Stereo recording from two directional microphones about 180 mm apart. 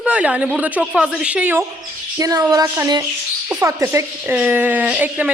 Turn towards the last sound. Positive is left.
turn(degrees=-10)  # may be behind; listen again after turning